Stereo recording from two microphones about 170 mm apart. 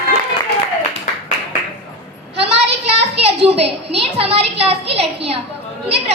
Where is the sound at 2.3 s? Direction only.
35° right (ahead or behind).